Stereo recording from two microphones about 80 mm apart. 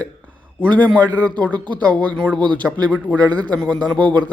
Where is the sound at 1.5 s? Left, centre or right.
Right.